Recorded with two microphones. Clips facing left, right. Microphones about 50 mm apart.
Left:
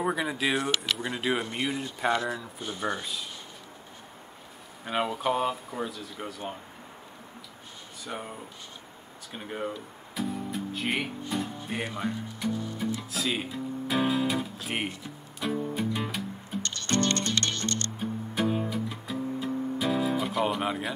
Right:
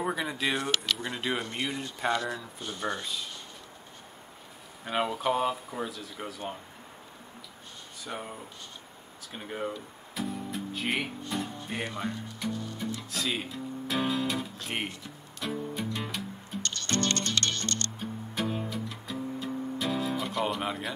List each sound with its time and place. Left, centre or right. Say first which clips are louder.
0.0 s speech: left 2 dB; centre
3.0 s speech: even; centre
4.8 s speech: left 1 dB; centre
8.0 s speech: left 1 dB; centre
9.3 s guitar: left 1 dB; centre
11.5 s speech: left 1 dB; centre
12.4 s music: left 3 dB; centre
12.7 s guitar: left 3 dB; centre
15.0 s music: left 4 dB; centre
16.6 s music: left 2 dB; left
17.9 s music: left 4 dB; centre